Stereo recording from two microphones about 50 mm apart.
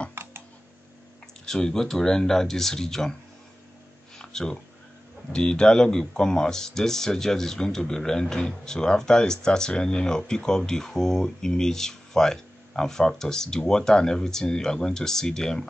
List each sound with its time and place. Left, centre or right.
0.1 s typing: right
1.4 s speech: centre
4.2 s a sound: centre
5.3 s speech: centre